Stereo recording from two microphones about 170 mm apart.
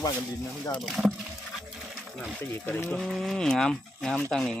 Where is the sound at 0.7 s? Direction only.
Centre (ahead or behind).